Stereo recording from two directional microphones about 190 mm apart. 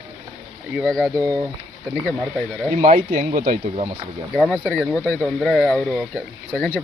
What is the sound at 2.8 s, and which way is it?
Speech, 40° right (ahead or behind).